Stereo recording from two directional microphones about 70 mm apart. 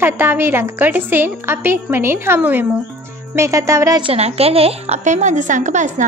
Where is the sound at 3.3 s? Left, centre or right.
Right.